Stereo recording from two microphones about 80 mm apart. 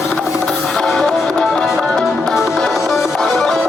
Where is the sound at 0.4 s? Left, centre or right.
Centre.